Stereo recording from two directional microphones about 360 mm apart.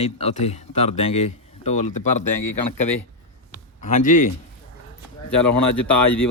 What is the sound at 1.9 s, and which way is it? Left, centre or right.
Speech, left.